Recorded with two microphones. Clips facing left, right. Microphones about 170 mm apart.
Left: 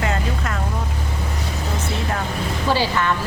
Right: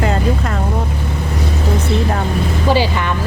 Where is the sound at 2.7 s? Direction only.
15° right (ahead or behind).